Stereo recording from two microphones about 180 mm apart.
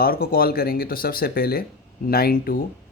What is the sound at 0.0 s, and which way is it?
Speech, 55° left (ahead or behind).